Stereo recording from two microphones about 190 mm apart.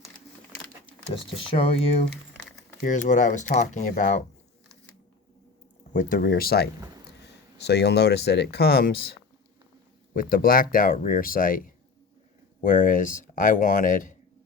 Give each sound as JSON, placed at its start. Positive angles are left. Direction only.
{"t": 1.3, "sound": "speech", "side_deg": 30}
{"t": 5.9, "sound": "speech", "side_deg": 45}
{"t": 10.2, "sound": "speech", "side_deg": 50}